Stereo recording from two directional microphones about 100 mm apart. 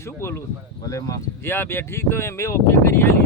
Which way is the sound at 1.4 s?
25° left (ahead or behind).